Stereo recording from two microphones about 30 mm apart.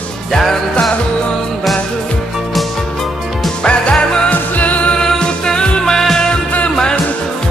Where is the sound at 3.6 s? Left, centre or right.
Left.